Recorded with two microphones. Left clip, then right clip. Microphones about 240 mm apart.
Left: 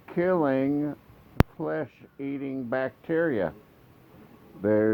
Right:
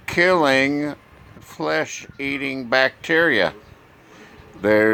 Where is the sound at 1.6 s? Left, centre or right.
Centre.